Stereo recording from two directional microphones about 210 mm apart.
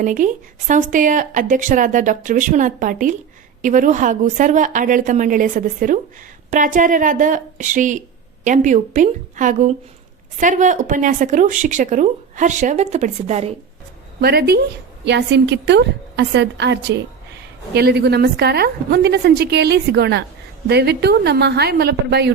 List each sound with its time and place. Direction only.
0.0 s a woman's voice: 40° right (ahead or behind)
14.2 s a woman's voice: 50° right (ahead or behind)